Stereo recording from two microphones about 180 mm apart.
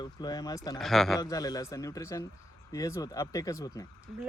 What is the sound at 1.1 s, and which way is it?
Speech, 20° left (ahead or behind).